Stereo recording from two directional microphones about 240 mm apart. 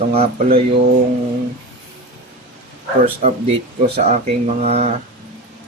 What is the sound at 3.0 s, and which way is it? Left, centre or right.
Speech, right.